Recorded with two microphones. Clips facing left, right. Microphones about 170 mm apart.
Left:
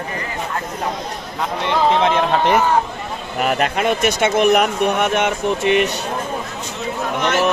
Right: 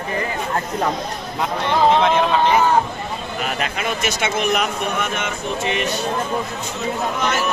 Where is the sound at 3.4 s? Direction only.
55° left (ahead or behind).